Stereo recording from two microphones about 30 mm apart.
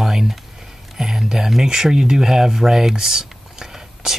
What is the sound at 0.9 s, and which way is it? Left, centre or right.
Speech, centre.